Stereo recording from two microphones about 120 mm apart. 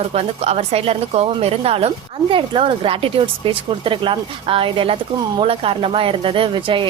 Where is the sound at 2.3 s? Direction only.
45° right (ahead or behind).